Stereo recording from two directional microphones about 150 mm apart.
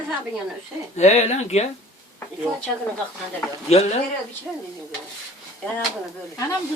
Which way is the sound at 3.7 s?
45° left (ahead or behind).